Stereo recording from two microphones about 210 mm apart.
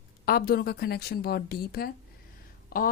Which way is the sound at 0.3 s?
45° left (ahead or behind).